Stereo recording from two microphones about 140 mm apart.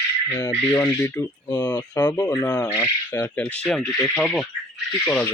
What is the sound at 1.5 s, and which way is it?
Speech, 30° left (ahead or behind).